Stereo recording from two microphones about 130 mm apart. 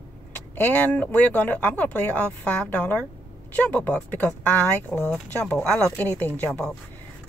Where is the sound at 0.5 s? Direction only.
15° left (ahead or behind).